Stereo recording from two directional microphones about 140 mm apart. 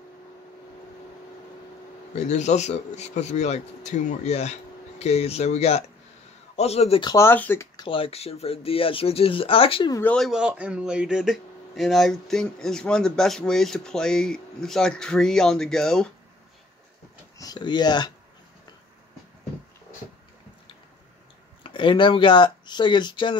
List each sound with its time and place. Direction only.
2.1 s a man's voice: 55° left (ahead or behind)
7.2 s speech: 15° left (ahead or behind)
7.7 s speech: 35° left (ahead or behind)
10.0 s speech: centre (ahead or behind)
17.4 s speech: 30° left (ahead or behind)
21.6 s speech: 35° left (ahead or behind)